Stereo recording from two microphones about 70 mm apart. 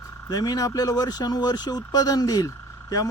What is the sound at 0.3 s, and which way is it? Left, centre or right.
Speech, left.